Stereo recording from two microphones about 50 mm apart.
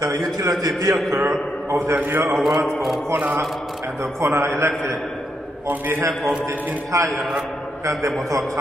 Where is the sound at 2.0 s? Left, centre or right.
Right.